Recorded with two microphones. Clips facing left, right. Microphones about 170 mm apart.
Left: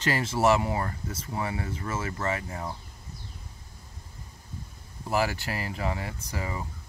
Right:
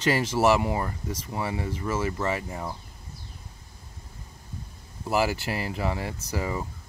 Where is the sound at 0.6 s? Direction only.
10° right (ahead or behind).